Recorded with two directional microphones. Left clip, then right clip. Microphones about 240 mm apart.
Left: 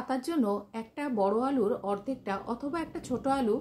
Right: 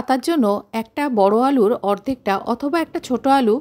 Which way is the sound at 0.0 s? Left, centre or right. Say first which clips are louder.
Right 12 dB; right.